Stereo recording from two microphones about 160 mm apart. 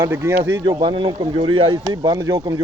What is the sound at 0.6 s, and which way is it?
Speech, 25° right (ahead or behind).